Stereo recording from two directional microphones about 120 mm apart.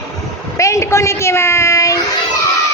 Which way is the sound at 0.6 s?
25° left (ahead or behind).